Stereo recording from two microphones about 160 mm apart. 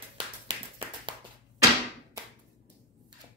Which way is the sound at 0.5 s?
30° right (ahead or behind).